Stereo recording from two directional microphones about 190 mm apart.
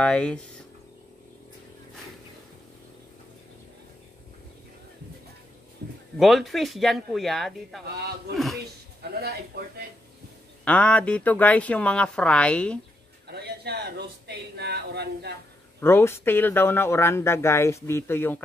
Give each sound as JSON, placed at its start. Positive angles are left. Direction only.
{"t": 0.0, "sound": "speech", "side_deg": 5}
{"t": 6.1, "sound": "speech", "side_deg": 0}
{"t": 9.5, "sound": "speech", "side_deg": -55}
{"t": 10.6, "sound": "speech", "side_deg": 5}
{"t": 13.3, "sound": "speech", "side_deg": -60}
{"t": 15.8, "sound": "speech", "side_deg": 15}